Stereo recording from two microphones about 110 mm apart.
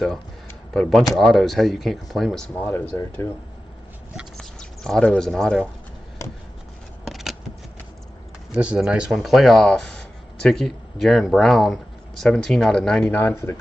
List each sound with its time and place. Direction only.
0.7 s speech: 5° left (ahead or behind)
2.5 s speech: 15° left (ahead or behind)
4.4 s speech: 5° left (ahead or behind)
7.1 s shuffling cards: 5° right (ahead or behind)
8.5 s speech: 10° right (ahead or behind)
13.1 s speech: 20° left (ahead or behind)